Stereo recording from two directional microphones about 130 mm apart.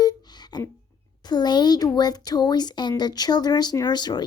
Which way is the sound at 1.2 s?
35° left (ahead or behind).